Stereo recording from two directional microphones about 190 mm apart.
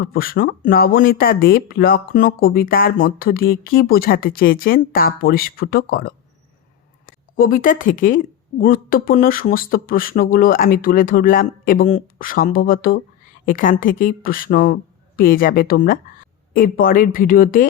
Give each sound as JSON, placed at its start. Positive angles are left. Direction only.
{"t": 0.0, "sound": "speech", "side_deg": 50}
{"t": 7.3, "sound": "speech", "side_deg": 45}